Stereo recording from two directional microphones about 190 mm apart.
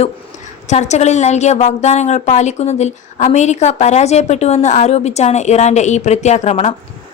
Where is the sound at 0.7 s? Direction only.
35° left (ahead or behind).